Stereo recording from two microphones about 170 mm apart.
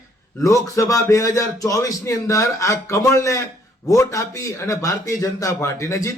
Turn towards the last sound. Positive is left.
turn(degrees=20)  # may be behind; listen again after turning